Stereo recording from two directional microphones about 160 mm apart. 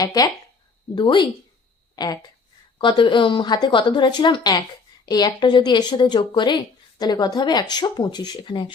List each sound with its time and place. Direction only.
0.9 s speech: 30° left (ahead or behind)